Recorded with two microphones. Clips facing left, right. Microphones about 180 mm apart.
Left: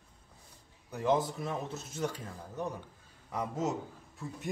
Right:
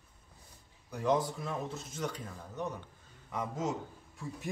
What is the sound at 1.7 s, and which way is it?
Speech, 25° left (ahead or behind).